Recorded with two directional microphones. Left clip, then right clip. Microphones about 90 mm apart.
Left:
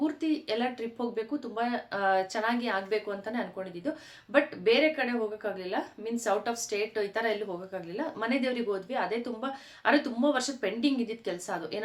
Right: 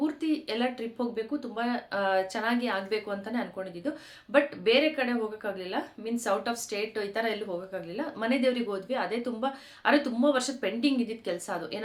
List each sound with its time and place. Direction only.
0.0 s a woman's voice: 30° right (ahead or behind)